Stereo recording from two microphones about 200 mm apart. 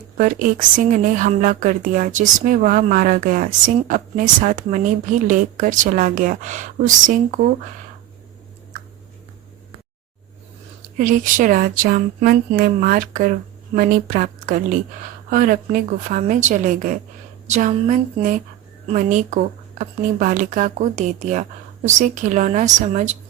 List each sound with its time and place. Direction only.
0.2 s a woman's voice: 40° right (ahead or behind)
10.9 s a woman's voice: 40° right (ahead or behind)